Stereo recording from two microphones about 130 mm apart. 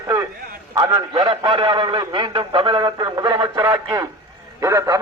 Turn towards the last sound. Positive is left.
turn(degrees=-25)  # may be behind; listen again after turning